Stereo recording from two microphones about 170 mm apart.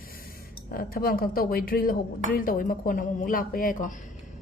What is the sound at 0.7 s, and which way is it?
A woman's voice, 65° left (ahead or behind).